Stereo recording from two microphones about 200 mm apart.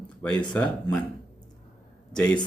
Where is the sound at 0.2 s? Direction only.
5° left (ahead or behind).